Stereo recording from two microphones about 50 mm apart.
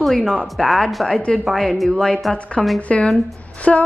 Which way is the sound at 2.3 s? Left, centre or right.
Left.